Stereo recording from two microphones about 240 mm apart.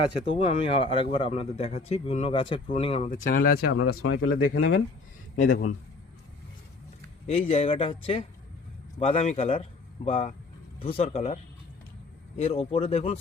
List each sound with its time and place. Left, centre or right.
0.3 s speech: left
4.0 s speech: left
5.5 s a man's voice: left
7.3 s a man's voice: left
12.4 s speech: left